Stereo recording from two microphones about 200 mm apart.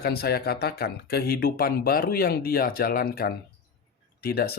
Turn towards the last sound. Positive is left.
turn(degrees=50)  # may be behind; listen again after turning